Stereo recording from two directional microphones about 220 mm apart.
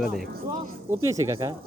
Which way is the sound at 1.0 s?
15° right (ahead or behind).